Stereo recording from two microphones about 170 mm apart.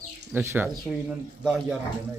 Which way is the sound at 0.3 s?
10° right (ahead or behind).